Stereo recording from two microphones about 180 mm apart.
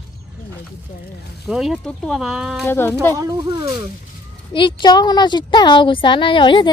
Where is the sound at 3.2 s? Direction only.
20° right (ahead or behind).